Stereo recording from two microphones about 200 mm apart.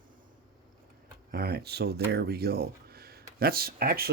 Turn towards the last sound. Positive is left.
turn(degrees=-50)  # may be behind; listen again after turning